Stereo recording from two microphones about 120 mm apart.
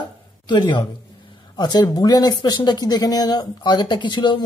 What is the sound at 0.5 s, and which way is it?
Speech, 40° left (ahead or behind).